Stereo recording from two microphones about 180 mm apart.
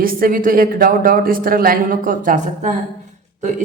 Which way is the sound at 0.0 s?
55° right (ahead or behind).